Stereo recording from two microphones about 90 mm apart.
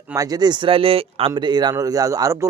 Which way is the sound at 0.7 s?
90° right.